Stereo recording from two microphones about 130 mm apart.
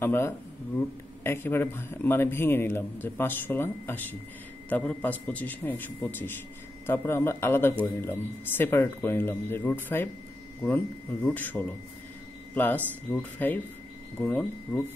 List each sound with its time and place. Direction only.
0.0 s speech: 15° left (ahead or behind)